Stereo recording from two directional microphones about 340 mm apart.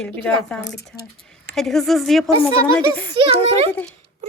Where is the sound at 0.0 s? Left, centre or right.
Centre.